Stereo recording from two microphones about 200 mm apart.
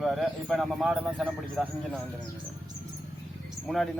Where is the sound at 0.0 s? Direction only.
Centre (ahead or behind).